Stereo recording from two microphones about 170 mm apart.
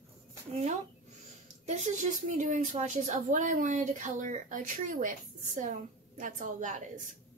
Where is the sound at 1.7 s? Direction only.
45° right (ahead or behind).